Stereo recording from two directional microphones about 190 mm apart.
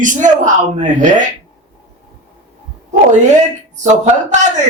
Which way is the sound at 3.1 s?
40° right (ahead or behind).